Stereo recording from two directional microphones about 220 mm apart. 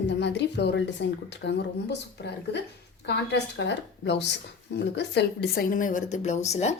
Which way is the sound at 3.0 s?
50° left (ahead or behind).